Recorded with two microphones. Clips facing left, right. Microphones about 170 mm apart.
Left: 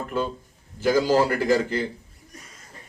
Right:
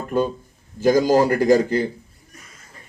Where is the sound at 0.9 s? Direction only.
40° right (ahead or behind).